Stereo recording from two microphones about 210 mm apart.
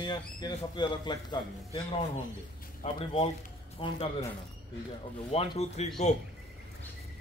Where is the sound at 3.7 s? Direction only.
30° left (ahead or behind).